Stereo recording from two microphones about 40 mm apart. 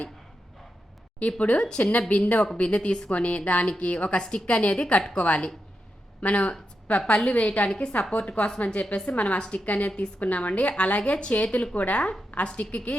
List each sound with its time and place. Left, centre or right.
1.4 s a woman's voice: left